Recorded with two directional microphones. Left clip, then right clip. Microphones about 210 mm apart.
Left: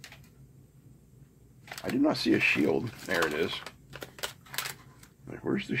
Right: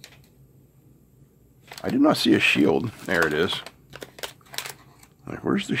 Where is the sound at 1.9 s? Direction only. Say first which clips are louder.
Right 7 dB; 50° right (ahead or behind).